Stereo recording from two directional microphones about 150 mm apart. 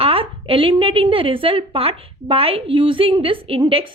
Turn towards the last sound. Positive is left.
turn(degrees=-40)  # may be behind; listen again after turning